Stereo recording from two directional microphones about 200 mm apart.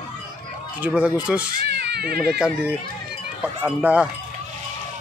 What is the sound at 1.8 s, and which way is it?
Cat, 55° right (ahead or behind).